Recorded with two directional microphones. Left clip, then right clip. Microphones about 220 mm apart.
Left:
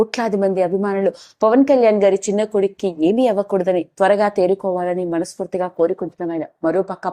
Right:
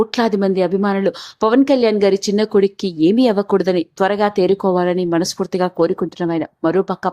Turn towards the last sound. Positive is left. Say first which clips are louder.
# right 2 dB
turn(degrees=-20)  # may be behind; listen again after turning